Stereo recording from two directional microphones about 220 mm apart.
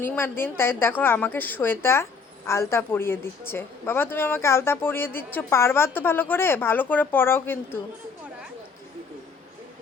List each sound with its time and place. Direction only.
0.0 s a woman's voice: 10° left (ahead or behind)